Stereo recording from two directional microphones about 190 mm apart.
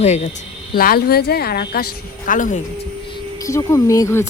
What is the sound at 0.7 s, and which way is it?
A woman's voice, 50° left (ahead or behind).